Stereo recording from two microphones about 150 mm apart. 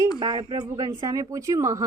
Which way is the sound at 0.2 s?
30° right (ahead or behind).